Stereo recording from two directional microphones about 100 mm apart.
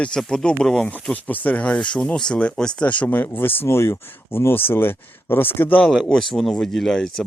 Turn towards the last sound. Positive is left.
turn(degrees=5)  # may be behind; listen again after turning